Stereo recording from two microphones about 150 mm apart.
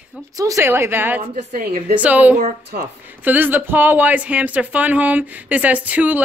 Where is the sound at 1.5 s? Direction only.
60° right (ahead or behind).